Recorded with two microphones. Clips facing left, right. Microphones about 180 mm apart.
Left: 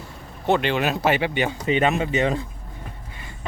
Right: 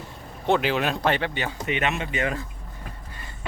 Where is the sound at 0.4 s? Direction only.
Centre (ahead or behind); by 1.5 s 15° left (ahead or behind).